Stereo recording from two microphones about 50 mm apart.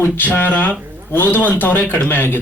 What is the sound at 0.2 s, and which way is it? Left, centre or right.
A man's voice, left.